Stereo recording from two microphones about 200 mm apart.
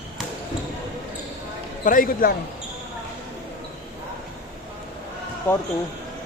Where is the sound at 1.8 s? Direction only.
45° left (ahead or behind).